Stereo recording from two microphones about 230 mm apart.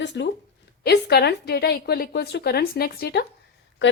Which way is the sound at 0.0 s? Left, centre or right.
Left.